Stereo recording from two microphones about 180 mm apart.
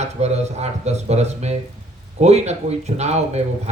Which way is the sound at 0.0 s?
35° right (ahead or behind).